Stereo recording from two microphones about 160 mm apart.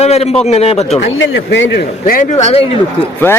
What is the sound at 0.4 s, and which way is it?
Speech, 40° left (ahead or behind).